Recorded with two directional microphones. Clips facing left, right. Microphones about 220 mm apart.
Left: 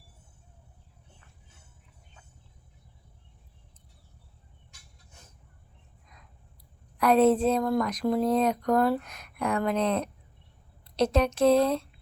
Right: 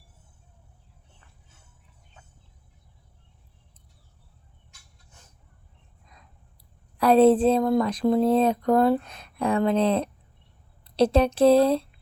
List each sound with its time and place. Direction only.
7.0 s speech: 30° right (ahead or behind)